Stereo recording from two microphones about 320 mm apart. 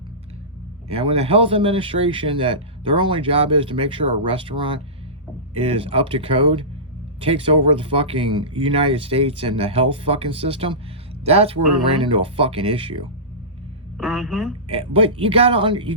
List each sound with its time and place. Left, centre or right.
0.9 s speech: centre
14.0 s a woman's voice: centre
14.7 s speech: centre